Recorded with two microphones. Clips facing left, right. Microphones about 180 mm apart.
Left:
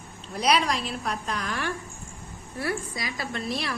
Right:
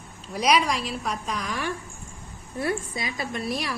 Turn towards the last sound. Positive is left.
turn(degrees=-10)  # may be behind; listen again after turning